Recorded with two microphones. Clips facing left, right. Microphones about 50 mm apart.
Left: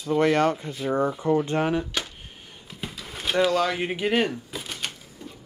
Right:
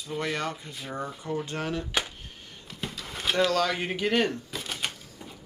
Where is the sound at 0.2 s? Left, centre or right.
Left.